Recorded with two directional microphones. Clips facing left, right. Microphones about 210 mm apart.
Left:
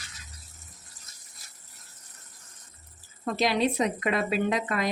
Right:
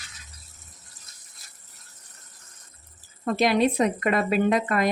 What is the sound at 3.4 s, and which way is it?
Speech, 50° right (ahead or behind).